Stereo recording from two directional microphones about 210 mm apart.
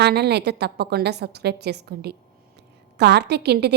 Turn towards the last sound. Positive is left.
turn(degrees=-50)  # may be behind; listen again after turning